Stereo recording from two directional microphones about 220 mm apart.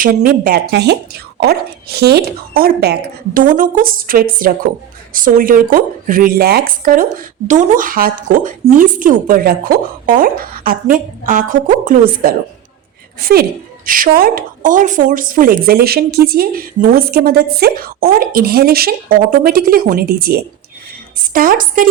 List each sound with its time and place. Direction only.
0.0 s a woman's voice: 40° right (ahead or behind)